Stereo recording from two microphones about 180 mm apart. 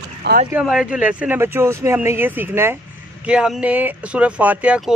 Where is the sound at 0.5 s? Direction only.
5° right (ahead or behind).